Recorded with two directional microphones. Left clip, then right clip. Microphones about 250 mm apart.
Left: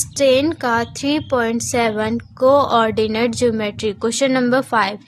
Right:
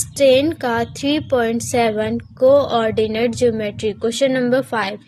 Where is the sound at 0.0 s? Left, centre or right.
Centre.